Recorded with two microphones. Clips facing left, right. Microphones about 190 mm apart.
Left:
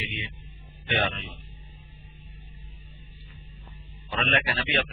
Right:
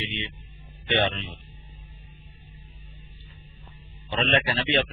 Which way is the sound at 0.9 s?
25° right (ahead or behind).